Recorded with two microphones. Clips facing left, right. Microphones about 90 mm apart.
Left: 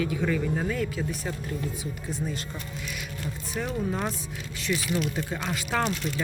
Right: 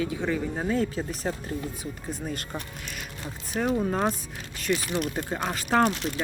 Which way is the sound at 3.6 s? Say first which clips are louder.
Right 5 dB; 35° right (ahead or behind).